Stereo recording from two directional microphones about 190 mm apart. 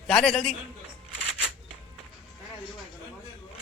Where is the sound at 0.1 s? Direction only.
5° left (ahead or behind).